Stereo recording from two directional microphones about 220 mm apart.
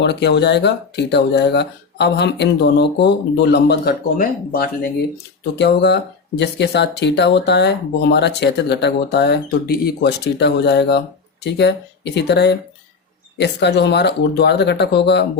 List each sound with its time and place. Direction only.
0.0 s speech: 50° left (ahead or behind)